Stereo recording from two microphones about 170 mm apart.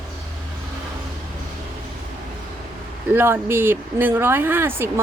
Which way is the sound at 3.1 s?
15° right (ahead or behind).